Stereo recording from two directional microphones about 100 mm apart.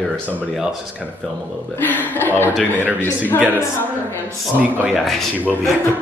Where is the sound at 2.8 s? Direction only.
20° right (ahead or behind).